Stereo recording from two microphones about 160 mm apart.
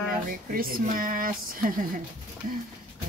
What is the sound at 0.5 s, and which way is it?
Speech, 65° right (ahead or behind).